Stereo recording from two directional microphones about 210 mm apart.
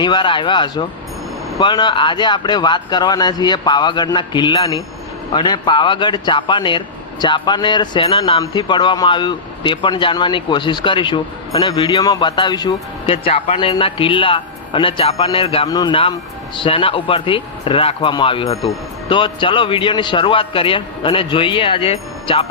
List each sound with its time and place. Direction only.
0.0 s speech: 20° left (ahead or behind)